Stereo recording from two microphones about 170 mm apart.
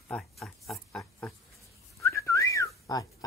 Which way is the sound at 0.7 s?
5° left (ahead or behind).